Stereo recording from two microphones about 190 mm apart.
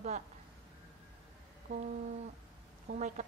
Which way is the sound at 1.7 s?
40° right (ahead or behind).